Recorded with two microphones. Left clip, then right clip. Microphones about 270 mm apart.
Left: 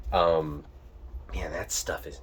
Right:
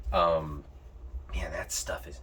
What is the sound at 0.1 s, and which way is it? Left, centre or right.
Speech, left.